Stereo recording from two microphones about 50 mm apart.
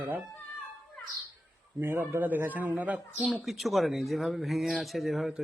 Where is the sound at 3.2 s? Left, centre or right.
Centre.